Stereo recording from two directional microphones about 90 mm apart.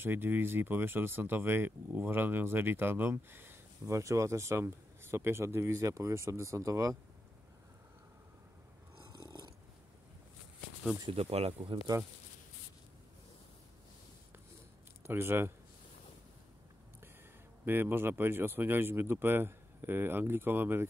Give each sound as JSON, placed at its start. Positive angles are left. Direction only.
{"t": 0.0, "sound": "speech", "side_deg": -20}
{"t": 3.8, "sound": "speech", "side_deg": -35}
{"t": 9.1, "sound": "snoring", "side_deg": -50}
{"t": 11.1, "sound": "speech", "side_deg": -90}
{"t": 11.7, "sound": "speech", "side_deg": -75}
{"t": 15.0, "sound": "speech", "side_deg": -25}
{"t": 17.6, "sound": "speech", "side_deg": -25}